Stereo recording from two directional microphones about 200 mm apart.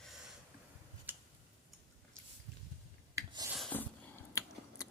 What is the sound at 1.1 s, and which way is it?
Tick-tock, 10° right (ahead or behind).